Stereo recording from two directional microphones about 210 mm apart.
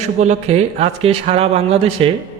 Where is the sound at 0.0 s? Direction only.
35° right (ahead or behind).